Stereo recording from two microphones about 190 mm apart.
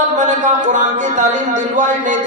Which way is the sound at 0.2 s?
40° right (ahead or behind).